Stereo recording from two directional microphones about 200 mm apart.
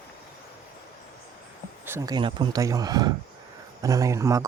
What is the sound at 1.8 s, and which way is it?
Speech, 15° right (ahead or behind).